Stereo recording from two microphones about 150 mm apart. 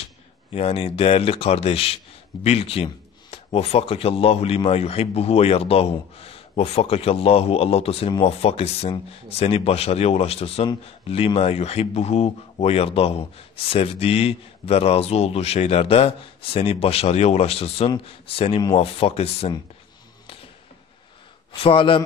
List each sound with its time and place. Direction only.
0.0 s speech: 40° left (ahead or behind)
21.5 s speech: 35° left (ahead or behind)